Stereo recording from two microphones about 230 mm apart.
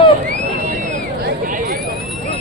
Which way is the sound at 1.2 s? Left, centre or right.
Right.